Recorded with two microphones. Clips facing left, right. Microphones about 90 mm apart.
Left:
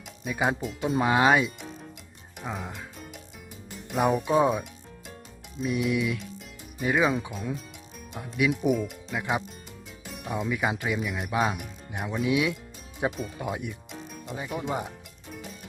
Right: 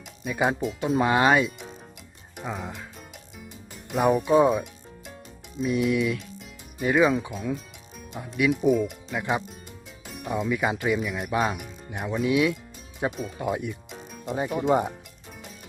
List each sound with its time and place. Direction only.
0.3 s speech: centre (ahead or behind)
2.4 s music: centre (ahead or behind)
3.9 s speech: centre (ahead or behind)
8.4 s speech: 10° left (ahead or behind)
8.7 s speech: centre (ahead or behind)
10.1 s music: centre (ahead or behind)
10.5 s speech: centre (ahead or behind)
14.3 s speech: 45° right (ahead or behind)